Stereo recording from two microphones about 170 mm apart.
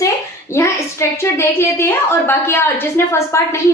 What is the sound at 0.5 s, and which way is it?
A woman's voice, 15° left (ahead or behind).